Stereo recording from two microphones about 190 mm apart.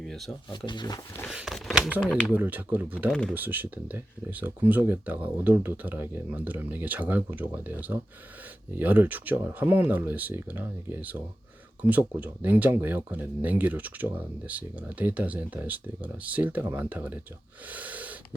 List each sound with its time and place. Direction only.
0.0 s a sound: centre (ahead or behind)
0.5 s speech: 25° left (ahead or behind)
1.3 s speech: 5° right (ahead or behind)
2.3 s speech: 10° right (ahead or behind)
3.1 s speech: 5° left (ahead or behind)
3.3 s speech: 10° right (ahead or behind)
17.7 s snort: 10° right (ahead or behind)